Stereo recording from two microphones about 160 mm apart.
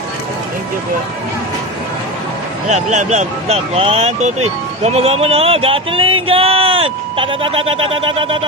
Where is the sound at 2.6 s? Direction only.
50° right (ahead or behind).